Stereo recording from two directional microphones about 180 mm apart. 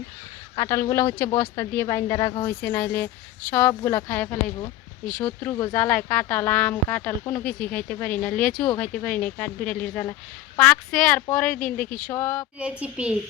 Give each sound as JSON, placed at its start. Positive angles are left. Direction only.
{"t": 0.5, "sound": "speech", "side_deg": 20}
{"t": 2.6, "sound": "a woman's voice", "side_deg": 10}
{"t": 12.5, "sound": "a child's voice", "side_deg": -5}